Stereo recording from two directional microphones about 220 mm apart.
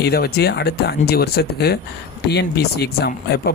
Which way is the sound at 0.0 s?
45° left (ahead or behind).